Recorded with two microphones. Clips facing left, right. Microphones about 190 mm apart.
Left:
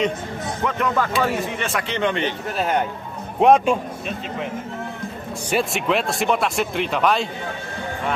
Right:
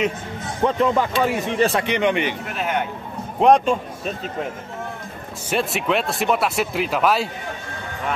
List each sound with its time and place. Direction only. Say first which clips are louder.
0.7 s speech: right 5 dB; 30° right (ahead or behind)
0.9 s speech: right 1 dB; 15° right (ahead or behind)
1.6 s speech: right 7 dB; 35° right (ahead or behind)
1.9 s speech: right 2 dB; 15° right (ahead or behind)
2.5 s speech: left 4 dB; 35° left (ahead or behind)
3.3 s speech: even; 5° left (ahead or behind)
5.5 s speech: even; centre (ahead or behind)